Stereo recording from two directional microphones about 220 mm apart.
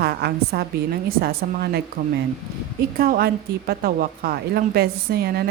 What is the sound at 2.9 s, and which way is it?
A woman's voice, 40° right (ahead or behind).